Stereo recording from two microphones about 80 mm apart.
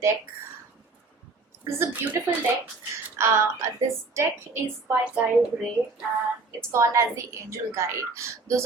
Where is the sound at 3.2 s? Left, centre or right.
Right.